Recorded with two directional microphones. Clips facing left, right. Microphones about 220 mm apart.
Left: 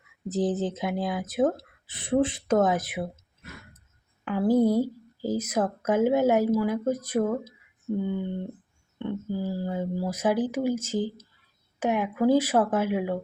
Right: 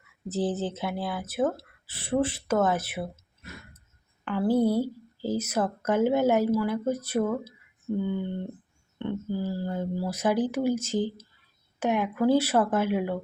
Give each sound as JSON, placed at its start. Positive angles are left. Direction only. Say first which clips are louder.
{"t": 0.3, "sound": "speech", "louder": "left 2 dB", "side_deg": 15}
{"t": 4.3, "sound": "speech", "louder": "left 2 dB", "side_deg": 10}
{"t": 9.0, "sound": "speech", "louder": "even", "side_deg": 10}